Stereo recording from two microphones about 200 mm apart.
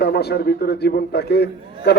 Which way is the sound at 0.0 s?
55° left (ahead or behind).